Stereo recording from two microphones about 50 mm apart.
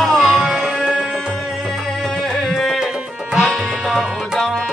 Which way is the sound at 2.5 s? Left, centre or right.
Centre.